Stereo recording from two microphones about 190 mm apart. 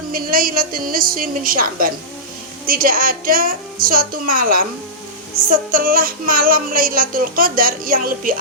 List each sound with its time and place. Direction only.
0.1 s music: 50° right (ahead or behind)